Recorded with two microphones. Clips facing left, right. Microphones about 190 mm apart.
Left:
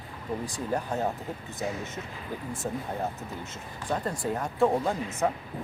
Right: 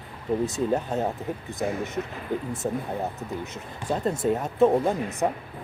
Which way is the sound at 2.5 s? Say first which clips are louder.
Right 4 dB; 20° right (ahead or behind).